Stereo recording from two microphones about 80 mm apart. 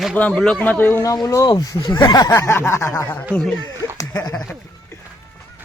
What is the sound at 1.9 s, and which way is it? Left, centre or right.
Speech, left.